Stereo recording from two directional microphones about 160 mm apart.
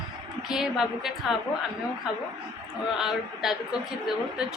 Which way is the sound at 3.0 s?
5° right (ahead or behind).